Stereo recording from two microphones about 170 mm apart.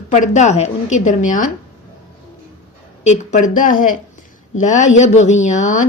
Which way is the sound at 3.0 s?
45° left (ahead or behind).